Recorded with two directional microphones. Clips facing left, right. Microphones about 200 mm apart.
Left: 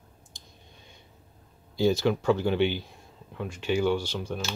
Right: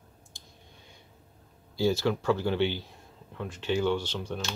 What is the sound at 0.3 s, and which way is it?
Clicking, 20° left (ahead or behind).